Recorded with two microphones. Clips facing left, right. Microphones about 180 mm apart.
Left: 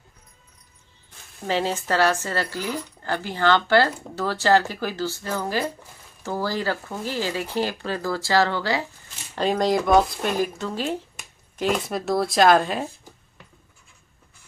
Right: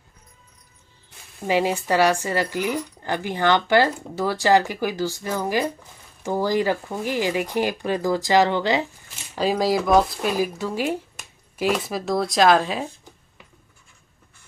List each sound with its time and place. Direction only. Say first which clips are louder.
1.4 s speech: right 3 dB; 10° right (ahead or behind)
9.3 s speech: even; 5° right (ahead or behind)